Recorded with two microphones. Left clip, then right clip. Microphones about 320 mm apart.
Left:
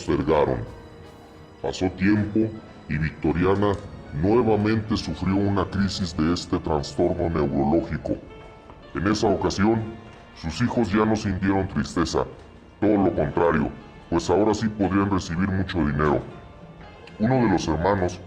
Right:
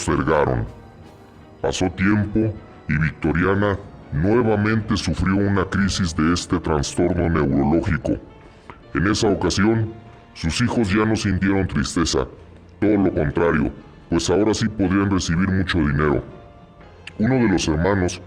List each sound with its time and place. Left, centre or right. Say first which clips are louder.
0.0 s a man's voice: right 2 dB; right
1.6 s a man's voice: right 3 dB; right